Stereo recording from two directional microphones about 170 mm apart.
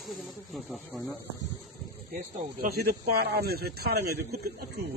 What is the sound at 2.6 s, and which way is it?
A man's voice, 65° right (ahead or behind).